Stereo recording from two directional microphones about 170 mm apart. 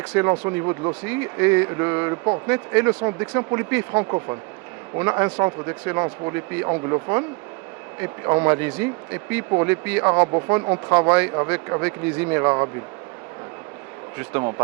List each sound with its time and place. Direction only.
0.1 s speech: 15° right (ahead or behind)
1.0 s speech: 10° right (ahead or behind)